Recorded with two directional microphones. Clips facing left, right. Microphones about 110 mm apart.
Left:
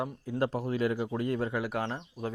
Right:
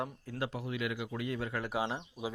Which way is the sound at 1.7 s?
10° right (ahead or behind).